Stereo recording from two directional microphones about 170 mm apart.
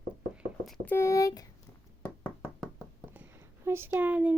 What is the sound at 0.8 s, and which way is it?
Speech, 15° left (ahead or behind).